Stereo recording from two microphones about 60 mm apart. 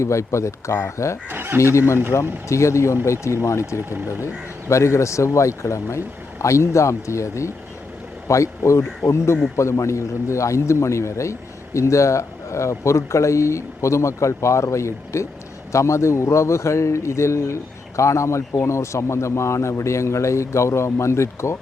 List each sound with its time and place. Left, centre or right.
0.0 s a man's voice: left
1.3 s speech: right
2.1 s a man's voice: left
3.8 s speech: right
4.7 s a man's voice: left